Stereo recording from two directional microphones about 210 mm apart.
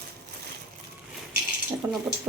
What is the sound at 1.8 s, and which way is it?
Speech, 10° right (ahead or behind).